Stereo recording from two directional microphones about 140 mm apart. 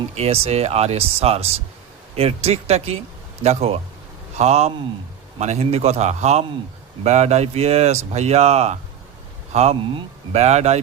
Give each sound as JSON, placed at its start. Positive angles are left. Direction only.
{"t": 0.1, "sound": "speech", "side_deg": -45}